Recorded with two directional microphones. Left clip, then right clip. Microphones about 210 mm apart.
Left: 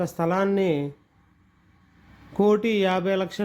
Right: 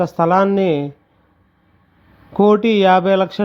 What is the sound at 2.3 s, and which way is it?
A man's voice, 20° right (ahead or behind).